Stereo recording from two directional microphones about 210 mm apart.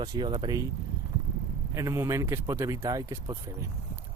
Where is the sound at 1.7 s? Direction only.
15° right (ahead or behind).